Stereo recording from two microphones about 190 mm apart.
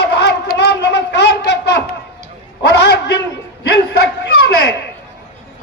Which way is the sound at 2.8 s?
60° left (ahead or behind).